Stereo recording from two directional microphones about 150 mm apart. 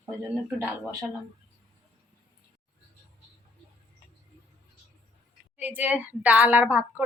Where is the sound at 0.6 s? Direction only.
15° right (ahead or behind).